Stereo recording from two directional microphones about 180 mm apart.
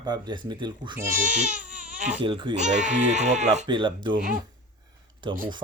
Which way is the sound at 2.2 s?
30° right (ahead or behind).